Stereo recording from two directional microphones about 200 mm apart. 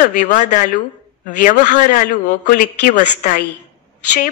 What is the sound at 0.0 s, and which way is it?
A woman's voice, 40° left (ahead or behind).